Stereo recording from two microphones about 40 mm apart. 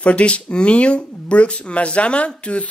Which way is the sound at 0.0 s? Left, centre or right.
Left.